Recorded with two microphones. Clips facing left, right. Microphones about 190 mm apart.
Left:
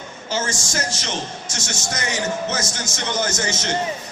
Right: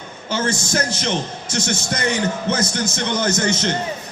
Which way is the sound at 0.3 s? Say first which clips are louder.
Right 4 dB; 60° right (ahead or behind).